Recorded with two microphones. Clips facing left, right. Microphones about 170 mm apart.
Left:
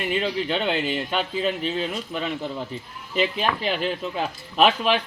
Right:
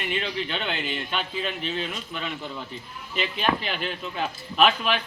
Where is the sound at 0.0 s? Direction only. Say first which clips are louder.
Left 5 dB; 35° left (ahead or behind).